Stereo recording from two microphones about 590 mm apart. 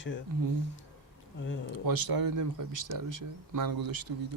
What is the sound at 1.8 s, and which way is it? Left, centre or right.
Speech, right.